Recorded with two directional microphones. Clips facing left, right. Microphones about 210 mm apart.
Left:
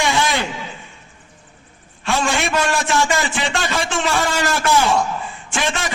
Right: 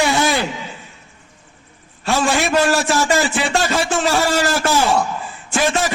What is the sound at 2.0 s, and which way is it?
A man's voice, 35° right (ahead or behind).